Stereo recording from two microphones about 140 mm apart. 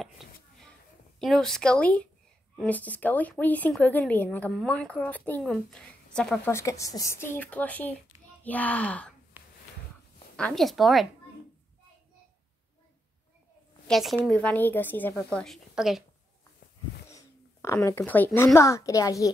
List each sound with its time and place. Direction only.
0.0 s a sound: centre (ahead or behind)
1.2 s a woman's voice: centre (ahead or behind)
6.4 s a woman's voice: 20° left (ahead or behind)
9.3 s a sound: 10° right (ahead or behind)
10.3 s speech: 5° left (ahead or behind)
13.8 s a woman's voice: centre (ahead or behind)
15.3 s speech: centre (ahead or behind)
17.1 s speech: 20° left (ahead or behind)